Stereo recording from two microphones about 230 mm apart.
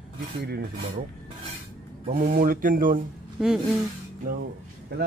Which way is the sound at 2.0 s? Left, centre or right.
Right.